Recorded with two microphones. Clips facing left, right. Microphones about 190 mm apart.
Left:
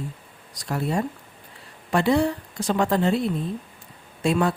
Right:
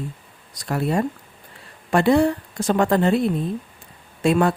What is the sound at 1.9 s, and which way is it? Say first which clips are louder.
A woman's voice: right 4 dB; 55° right (ahead or behind).